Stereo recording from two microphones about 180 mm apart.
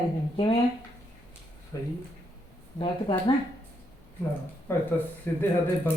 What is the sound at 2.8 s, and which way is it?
Speech, 30° left (ahead or behind).